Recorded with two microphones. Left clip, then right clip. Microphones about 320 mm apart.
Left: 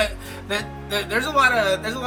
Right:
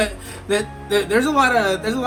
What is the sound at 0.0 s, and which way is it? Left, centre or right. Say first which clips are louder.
Speech: right 1 dB; centre.